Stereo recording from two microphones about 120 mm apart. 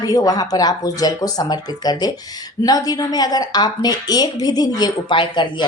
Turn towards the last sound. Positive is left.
turn(degrees=40)  # may be behind; listen again after turning